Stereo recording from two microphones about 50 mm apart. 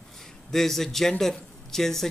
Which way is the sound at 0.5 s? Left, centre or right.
Centre.